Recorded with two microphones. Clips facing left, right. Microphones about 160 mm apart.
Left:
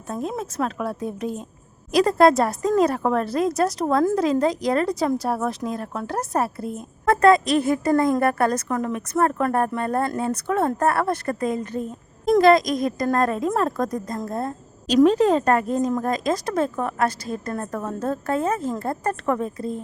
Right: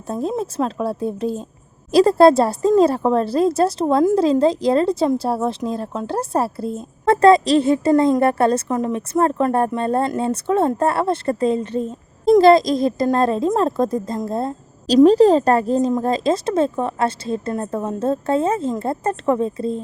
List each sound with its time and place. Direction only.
0.1 s a woman's voice: 30° right (ahead or behind)